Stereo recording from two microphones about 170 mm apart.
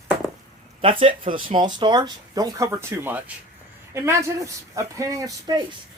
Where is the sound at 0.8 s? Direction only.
35° right (ahead or behind).